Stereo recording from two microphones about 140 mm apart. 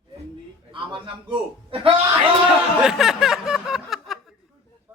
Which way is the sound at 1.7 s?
40° right (ahead or behind).